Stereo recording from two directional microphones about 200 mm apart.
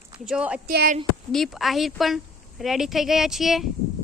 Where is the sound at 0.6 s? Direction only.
45° right (ahead or behind).